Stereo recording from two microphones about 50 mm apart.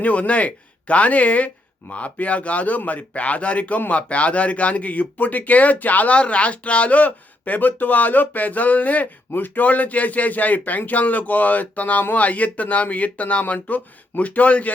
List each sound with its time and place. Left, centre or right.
0.0 s a man's voice: left